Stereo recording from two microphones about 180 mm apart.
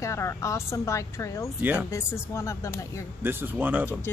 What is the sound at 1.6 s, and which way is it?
Speech, 10° right (ahead or behind).